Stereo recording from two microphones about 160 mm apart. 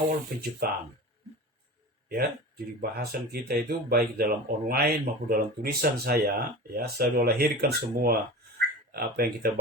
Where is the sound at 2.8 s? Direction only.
70° right (ahead or behind).